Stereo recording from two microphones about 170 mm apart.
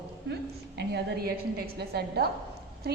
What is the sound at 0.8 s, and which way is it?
A woman's voice, 65° right (ahead or behind).